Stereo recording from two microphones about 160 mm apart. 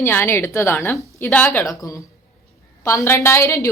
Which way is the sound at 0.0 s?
15° left (ahead or behind).